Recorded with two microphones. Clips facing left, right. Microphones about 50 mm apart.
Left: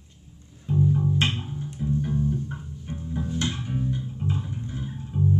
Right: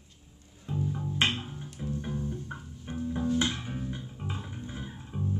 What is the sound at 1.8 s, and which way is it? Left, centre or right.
Music, centre.